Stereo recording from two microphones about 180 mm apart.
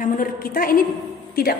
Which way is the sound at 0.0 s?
50° left (ahead or behind).